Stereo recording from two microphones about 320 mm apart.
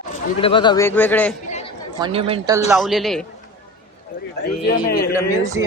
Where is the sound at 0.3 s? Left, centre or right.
Centre.